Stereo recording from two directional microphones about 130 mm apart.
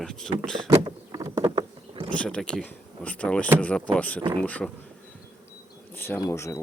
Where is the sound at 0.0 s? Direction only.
5° left (ahead or behind).